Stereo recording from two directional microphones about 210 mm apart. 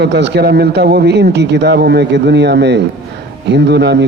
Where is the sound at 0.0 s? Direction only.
55° right (ahead or behind).